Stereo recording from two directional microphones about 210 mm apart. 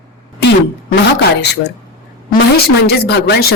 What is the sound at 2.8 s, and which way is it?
Speech, 50° left (ahead or behind).